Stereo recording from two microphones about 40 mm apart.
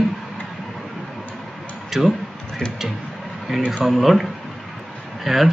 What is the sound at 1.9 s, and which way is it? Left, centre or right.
Speech, centre.